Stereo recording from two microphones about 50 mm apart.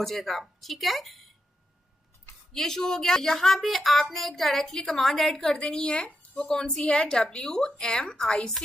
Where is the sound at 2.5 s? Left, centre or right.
Centre.